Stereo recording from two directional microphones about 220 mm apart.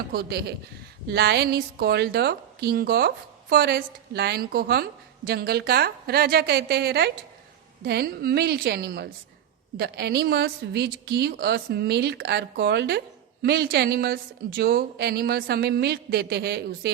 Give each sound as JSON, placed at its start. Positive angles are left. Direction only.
{"t": 0.1, "sound": "a woman's voice", "side_deg": -45}